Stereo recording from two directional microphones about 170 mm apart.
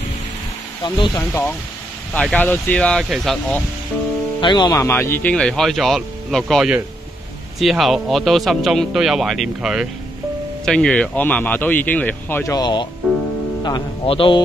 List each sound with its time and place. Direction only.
0.8 s speech: 25° left (ahead or behind)
2.1 s speech: 10° left (ahead or behind)
4.4 s speech: 25° left (ahead or behind)
12.5 s speech: 25° left (ahead or behind)